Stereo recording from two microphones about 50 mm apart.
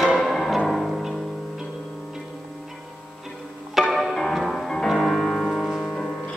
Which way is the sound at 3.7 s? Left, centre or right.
Centre.